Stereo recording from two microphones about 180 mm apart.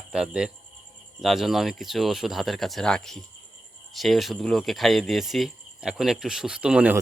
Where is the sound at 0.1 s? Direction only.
5° right (ahead or behind).